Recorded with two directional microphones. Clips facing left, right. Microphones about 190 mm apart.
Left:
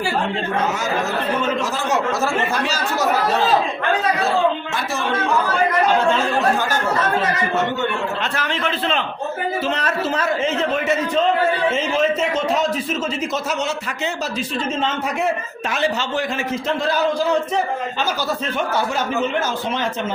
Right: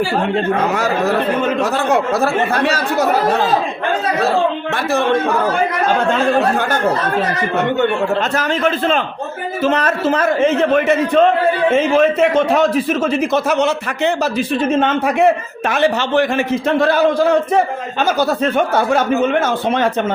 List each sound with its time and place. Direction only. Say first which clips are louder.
0.6 s a man's voice: right 5 dB; 60° right (ahead or behind)
4.7 s a man's voice: right 7 dB; 60° right (ahead or behind)
8.4 s a man's voice: right 6 dB; 45° right (ahead or behind)